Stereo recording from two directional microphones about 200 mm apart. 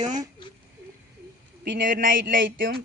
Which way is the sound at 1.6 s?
45° right (ahead or behind).